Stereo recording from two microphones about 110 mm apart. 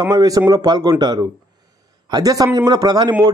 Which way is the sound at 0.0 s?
35° right (ahead or behind).